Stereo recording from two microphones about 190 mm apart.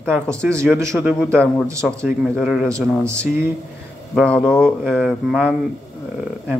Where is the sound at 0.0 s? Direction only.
5° left (ahead or behind).